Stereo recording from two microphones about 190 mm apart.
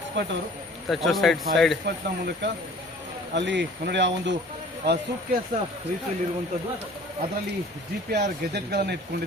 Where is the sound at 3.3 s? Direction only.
70° right (ahead or behind).